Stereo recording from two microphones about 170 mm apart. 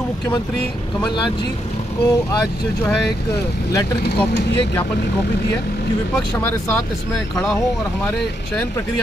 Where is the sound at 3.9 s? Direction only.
75° left (ahead or behind).